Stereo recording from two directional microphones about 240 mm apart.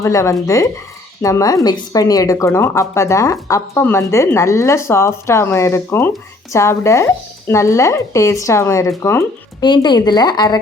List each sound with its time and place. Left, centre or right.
0.0 s a woman's voice: centre